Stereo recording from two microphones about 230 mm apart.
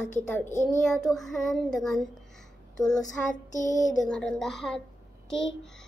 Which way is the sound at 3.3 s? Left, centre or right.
Left.